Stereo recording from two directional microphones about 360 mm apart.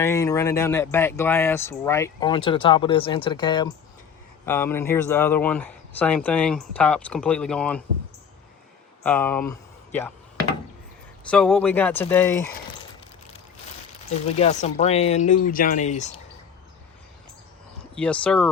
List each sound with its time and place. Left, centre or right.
0.0 s speech: centre
9.0 s speech: centre
11.3 s speech: centre
14.3 s speech: centre
17.9 s speech: centre